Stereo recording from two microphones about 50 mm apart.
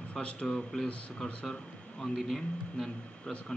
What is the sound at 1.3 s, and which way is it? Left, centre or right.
Speech, centre.